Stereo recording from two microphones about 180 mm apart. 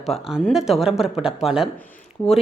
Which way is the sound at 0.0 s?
Centre (ahead or behind).